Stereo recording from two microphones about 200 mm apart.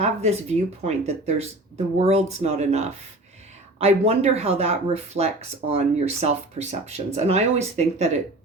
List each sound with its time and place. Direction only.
0.0 s speech: 35° right (ahead or behind)